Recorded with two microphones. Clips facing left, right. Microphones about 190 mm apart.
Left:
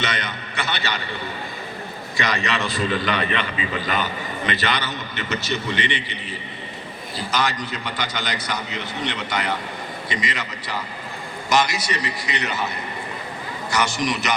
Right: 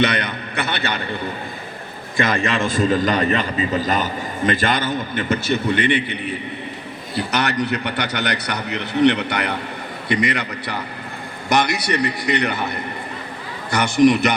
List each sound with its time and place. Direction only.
0.0 s a man's voice: 60° right (ahead or behind)
2.1 s a man's voice: 50° right (ahead or behind)